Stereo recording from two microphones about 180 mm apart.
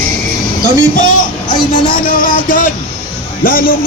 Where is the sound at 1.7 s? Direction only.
50° left (ahead or behind).